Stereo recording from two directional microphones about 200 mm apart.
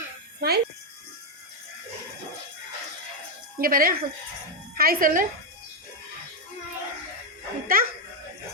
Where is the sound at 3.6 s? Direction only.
45° right (ahead or behind).